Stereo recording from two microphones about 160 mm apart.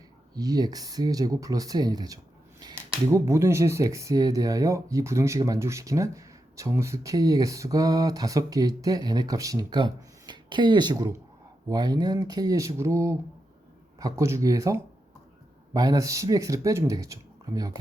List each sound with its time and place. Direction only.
0.3 s speech: 25° right (ahead or behind)